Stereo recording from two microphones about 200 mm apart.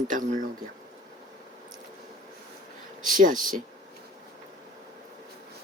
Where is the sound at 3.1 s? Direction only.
40° right (ahead or behind).